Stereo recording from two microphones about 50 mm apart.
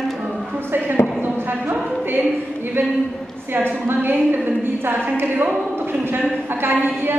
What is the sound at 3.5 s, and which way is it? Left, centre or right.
A woman's voice, right.